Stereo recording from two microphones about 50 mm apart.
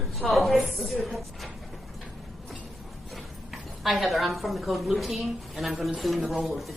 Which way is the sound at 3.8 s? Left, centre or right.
Centre.